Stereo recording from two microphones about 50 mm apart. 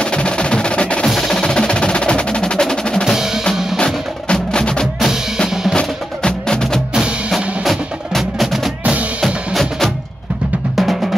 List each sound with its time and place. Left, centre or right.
0.0 s percussion: centre
1.0 s music: centre
3.7 s wood block: centre
5.8 s music: centre
7.0 s percussion: centre
7.6 s wood block: centre
9.2 s music: centre